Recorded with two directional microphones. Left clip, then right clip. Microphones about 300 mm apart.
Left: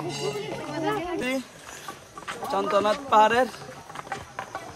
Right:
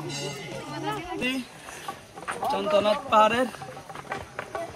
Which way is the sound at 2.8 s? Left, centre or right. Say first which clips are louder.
Left 1 dB; left.